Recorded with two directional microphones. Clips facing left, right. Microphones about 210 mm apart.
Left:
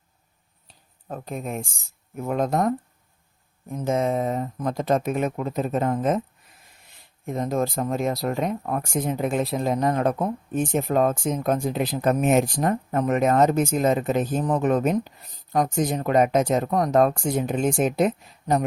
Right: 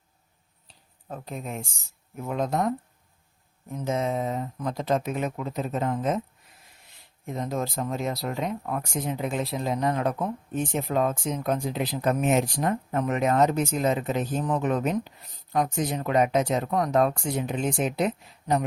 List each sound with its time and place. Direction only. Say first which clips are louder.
0.7 s a sound: left 3 dB; 50° left (ahead or behind)
2.2 s speech: left 4 dB; 50° left (ahead or behind)
7.3 s speech: left 5 dB; 50° left (ahead or behind)